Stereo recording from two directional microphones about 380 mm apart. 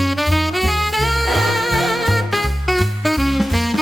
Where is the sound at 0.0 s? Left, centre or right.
Centre.